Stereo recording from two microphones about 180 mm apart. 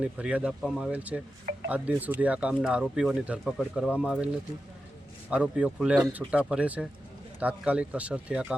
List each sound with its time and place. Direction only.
0.0 s speech: 5° right (ahead or behind)